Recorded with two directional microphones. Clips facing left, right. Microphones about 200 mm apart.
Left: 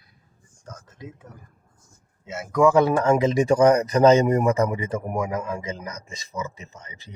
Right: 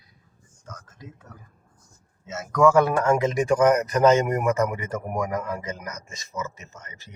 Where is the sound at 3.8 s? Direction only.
35° left (ahead or behind).